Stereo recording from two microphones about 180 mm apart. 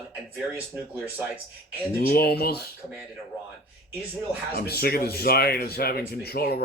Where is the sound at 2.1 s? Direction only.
60° left (ahead or behind).